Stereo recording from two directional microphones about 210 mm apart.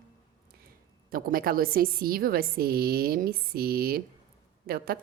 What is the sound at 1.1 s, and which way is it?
A woman's voice, 45° right (ahead or behind).